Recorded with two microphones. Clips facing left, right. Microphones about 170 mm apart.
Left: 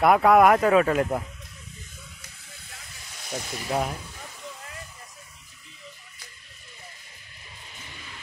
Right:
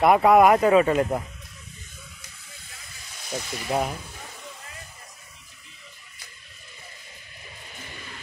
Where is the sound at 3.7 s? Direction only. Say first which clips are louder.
Right 1 dB; 5° right (ahead or behind).